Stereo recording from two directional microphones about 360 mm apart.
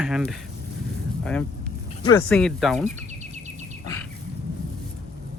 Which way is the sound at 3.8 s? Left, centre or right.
Centre.